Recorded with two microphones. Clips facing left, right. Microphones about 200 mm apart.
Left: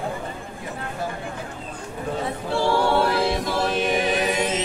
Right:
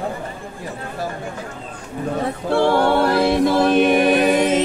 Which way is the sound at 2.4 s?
60° right (ahead or behind).